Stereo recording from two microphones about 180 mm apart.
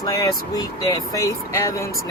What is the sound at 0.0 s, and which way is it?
Speech, 20° left (ahead or behind).